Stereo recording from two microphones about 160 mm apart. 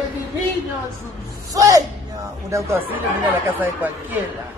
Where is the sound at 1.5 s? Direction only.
20° right (ahead or behind).